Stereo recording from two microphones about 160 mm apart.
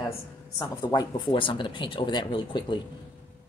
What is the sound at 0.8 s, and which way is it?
Speech, 25° left (ahead or behind).